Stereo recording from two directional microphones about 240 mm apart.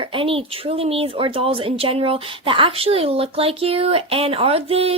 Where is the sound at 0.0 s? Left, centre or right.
Right.